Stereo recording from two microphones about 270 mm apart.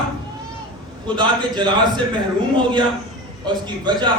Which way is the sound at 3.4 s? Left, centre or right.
Centre.